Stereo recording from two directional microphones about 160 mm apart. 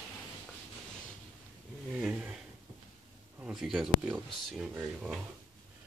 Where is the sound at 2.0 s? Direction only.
5° right (ahead or behind).